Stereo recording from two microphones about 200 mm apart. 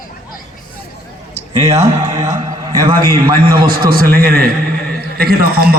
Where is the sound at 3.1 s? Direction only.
45° right (ahead or behind).